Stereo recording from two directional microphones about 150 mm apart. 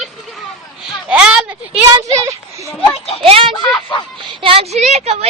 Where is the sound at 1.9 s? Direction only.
20° right (ahead or behind).